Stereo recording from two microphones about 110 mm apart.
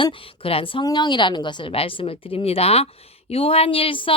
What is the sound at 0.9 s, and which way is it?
Speech, 40° left (ahead or behind).